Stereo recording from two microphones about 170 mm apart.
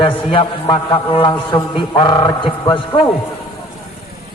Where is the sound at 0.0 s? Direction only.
30° left (ahead or behind).